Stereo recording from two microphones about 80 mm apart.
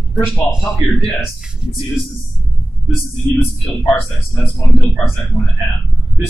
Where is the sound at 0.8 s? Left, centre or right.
Centre.